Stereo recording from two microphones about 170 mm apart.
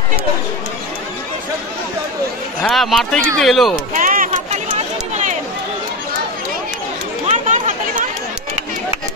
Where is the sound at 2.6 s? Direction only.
Centre (ahead or behind).